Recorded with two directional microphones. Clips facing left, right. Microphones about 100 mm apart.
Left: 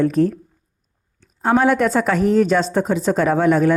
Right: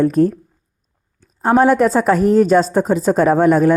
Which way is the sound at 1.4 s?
35° right (ahead or behind).